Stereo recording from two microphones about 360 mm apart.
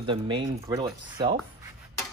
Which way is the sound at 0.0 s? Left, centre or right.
Centre.